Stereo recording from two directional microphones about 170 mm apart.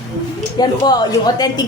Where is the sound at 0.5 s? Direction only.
25° left (ahead or behind).